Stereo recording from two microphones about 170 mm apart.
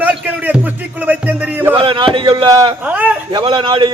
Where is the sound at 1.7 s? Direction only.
30° right (ahead or behind).